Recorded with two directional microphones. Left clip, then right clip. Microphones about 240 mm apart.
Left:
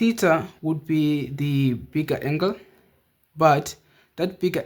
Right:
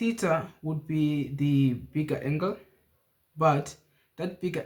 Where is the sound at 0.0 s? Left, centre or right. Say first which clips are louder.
Left 7 dB; left.